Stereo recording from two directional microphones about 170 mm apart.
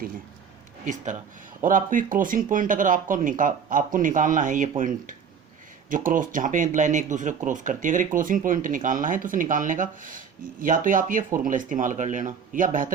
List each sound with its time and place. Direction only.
1.6 s speech: 50° right (ahead or behind)